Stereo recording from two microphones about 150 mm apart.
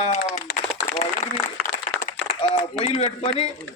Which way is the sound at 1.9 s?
60° left (ahead or behind).